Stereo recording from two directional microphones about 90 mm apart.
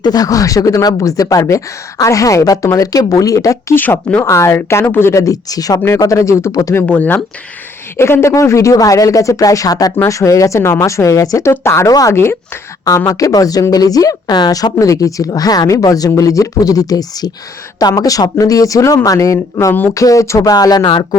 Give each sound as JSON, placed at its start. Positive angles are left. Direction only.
{"t": 0.0, "sound": "speech", "side_deg": 45}
{"t": 3.8, "sound": "a woman's voice", "side_deg": 20}
{"t": 6.8, "sound": "speech", "side_deg": 15}
{"t": 7.9, "sound": "speech", "side_deg": 30}
{"t": 12.1, "sound": "a woman's voice", "side_deg": 25}
{"t": 13.1, "sound": "a woman's voice", "side_deg": 40}
{"t": 20.8, "sound": "speech", "side_deg": 65}